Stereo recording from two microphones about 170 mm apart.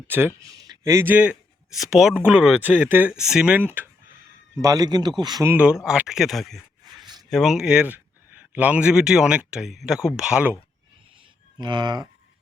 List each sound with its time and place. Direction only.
0.1 s a man's voice: 10° right (ahead or behind)
5.5 s speech: 5° right (ahead or behind)
7.0 s a sound: 25° right (ahead or behind)
7.3 s speech: centre (ahead or behind)
11.5 s speech: 25° right (ahead or behind)